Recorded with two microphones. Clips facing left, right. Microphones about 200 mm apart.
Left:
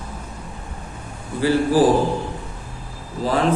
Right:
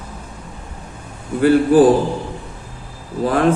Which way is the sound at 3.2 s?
55° right (ahead or behind).